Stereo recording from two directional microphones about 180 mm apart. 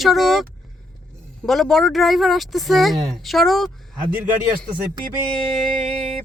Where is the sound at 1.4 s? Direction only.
Centre (ahead or behind).